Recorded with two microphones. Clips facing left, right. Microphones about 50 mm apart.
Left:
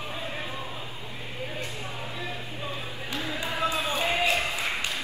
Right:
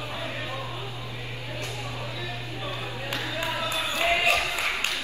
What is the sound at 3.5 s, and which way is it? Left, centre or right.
Music, left.